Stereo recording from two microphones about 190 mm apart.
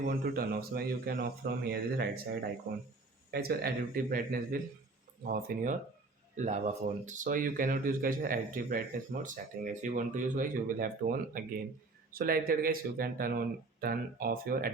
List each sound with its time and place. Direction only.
0.1 s speech: 50° right (ahead or behind)
6.3 s speech: 40° right (ahead or behind)